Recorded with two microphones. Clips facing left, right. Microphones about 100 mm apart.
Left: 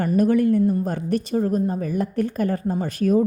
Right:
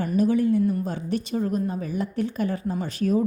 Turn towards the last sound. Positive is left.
turn(degrees=50)  # may be behind; listen again after turning